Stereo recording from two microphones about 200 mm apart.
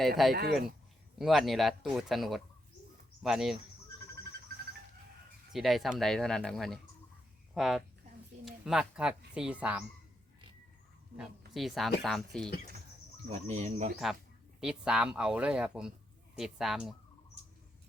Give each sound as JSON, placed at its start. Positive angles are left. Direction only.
{"t": 0.2, "sound": "speech", "side_deg": 0}
{"t": 5.5, "sound": "speech", "side_deg": 0}
{"t": 11.2, "sound": "speech", "side_deg": 0}
{"t": 13.3, "sound": "speech", "side_deg": -35}
{"t": 14.6, "sound": "speech", "side_deg": -5}